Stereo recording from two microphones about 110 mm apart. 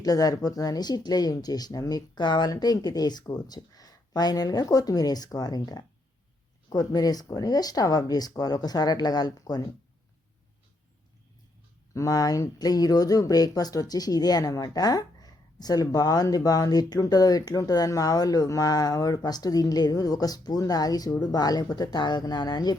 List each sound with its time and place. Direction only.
0.0 s speech: 35° left (ahead or behind)
11.9 s speech: 35° left (ahead or behind)